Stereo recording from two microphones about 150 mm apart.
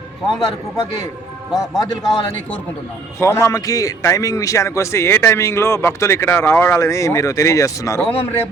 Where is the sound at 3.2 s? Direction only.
20° left (ahead or behind).